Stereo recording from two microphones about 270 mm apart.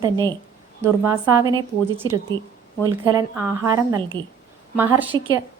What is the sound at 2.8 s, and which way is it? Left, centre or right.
Speech, centre.